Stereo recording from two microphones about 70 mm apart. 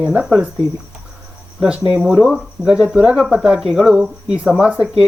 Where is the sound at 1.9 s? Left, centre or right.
Centre.